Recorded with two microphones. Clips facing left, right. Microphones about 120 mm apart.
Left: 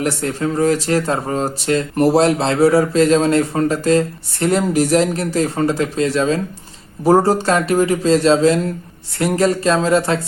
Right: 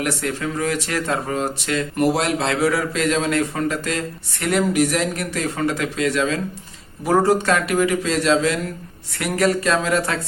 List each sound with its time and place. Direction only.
0.0 s speech: 30° left (ahead or behind)